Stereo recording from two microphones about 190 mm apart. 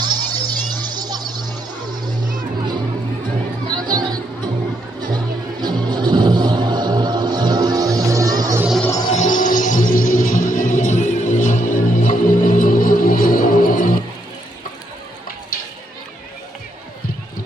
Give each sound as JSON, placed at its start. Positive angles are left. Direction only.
{"t": 0.0, "sound": "music", "side_deg": -20}
{"t": 3.7, "sound": "music", "side_deg": -20}
{"t": 8.8, "sound": "music", "side_deg": 15}
{"t": 9.1, "sound": "music", "side_deg": 40}